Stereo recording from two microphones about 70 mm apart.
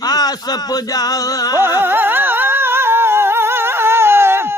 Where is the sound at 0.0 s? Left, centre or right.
Left.